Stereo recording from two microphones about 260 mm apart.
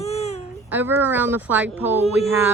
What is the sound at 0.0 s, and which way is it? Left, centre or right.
Baby cry, left.